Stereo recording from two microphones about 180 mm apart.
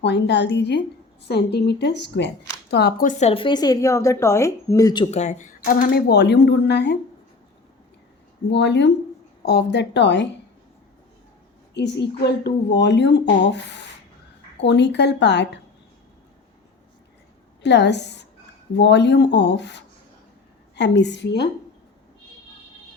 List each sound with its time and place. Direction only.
0.0 s speech: 75° left (ahead or behind)
3.1 s a woman's voice: 35° left (ahead or behind); by 5.0 s 20° left (ahead or behind)
5.1 s speech: 40° left (ahead or behind); by 6.9 s 75° left (ahead or behind)
8.4 s speech: 75° left (ahead or behind)
11.7 s speech: 70° left (ahead or behind)
17.6 s speech: 75° left (ahead or behind)